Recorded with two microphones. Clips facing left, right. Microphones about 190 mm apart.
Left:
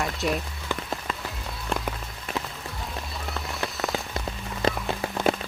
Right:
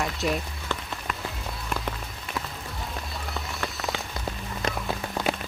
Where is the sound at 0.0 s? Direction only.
Centre (ahead or behind).